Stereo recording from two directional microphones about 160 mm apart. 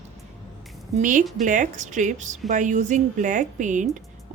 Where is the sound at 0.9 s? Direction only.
55° right (ahead or behind).